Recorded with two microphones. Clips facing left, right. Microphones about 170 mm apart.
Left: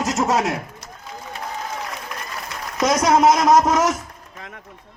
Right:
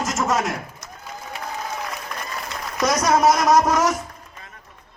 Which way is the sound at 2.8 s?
25° left (ahead or behind).